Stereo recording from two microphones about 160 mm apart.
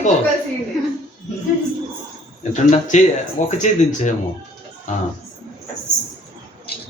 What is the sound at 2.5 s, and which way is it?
Speech, 50° left (ahead or behind).